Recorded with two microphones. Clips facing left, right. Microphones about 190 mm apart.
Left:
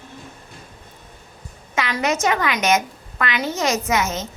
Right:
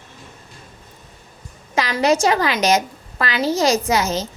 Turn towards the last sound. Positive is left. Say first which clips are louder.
# right 3 dB
turn(degrees=-35)  # may be behind; listen again after turning